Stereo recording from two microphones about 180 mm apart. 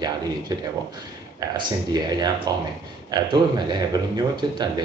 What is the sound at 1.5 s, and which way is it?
Speech, 20° right (ahead or behind).